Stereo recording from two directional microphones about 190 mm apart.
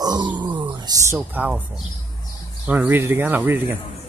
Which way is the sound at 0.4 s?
25° right (ahead or behind).